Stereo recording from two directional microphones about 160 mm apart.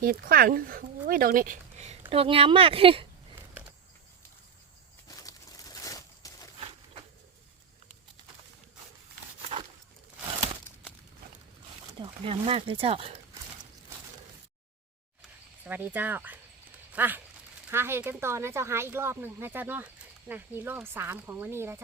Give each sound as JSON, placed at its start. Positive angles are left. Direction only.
{"t": 0.0, "sound": "speech", "side_deg": -65}
{"t": 1.8, "sound": "speech", "side_deg": -40}
{"t": 5.0, "sound": "a sound", "side_deg": 20}
{"t": 11.9, "sound": "speech", "side_deg": -30}
{"t": 15.6, "sound": "speech", "side_deg": -10}